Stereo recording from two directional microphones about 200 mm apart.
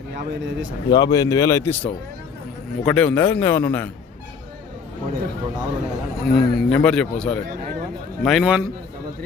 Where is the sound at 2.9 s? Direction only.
5° left (ahead or behind).